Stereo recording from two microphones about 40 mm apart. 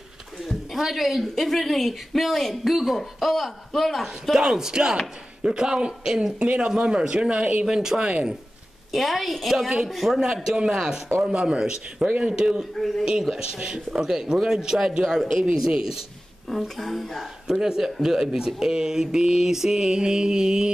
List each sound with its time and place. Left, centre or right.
0.4 s speech: centre
4.1 s a man's voice: centre
7.6 s speech: centre
8.9 s speech: centre
10.2 s speech: centre
11.3 s a man's voice: right
12.7 s speech: centre
13.3 s speech: centre
16.4 s speech: centre
17.5 s speech: centre